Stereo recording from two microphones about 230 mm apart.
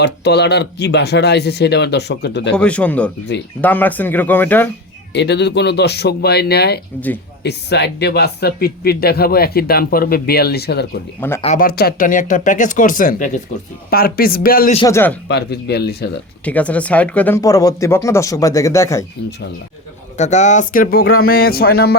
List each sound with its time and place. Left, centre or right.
0.0 s speech: left
2.6 s speech: centre
5.1 s speech: left
11.3 s speech: left
11.6 s speech: left
14.8 s speech: centre
15.3 s speech: left
16.4 s speech: centre
20.1 s speech: left